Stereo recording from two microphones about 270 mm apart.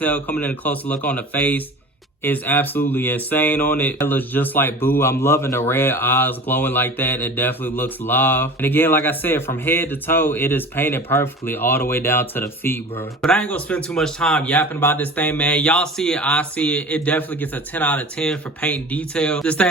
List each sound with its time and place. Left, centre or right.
0.0 s speech: centre